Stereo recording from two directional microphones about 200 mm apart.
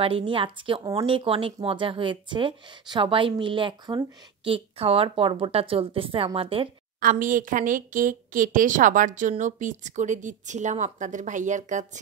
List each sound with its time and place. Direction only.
0.0 s speech: 25° right (ahead or behind)
7.0 s a woman's voice: 40° right (ahead or behind)